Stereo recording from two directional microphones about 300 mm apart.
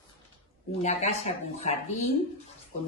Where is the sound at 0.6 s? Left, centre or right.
Left.